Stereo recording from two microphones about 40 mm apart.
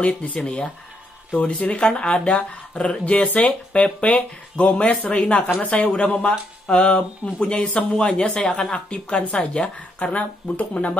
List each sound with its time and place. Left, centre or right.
0.0 s speech: left
1.4 s speech: left
1.9 s speech: left
8.0 s speech: centre
8.7 s speech: left
10.1 s speech: left